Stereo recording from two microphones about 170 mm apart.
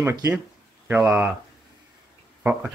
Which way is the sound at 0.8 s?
10° right (ahead or behind).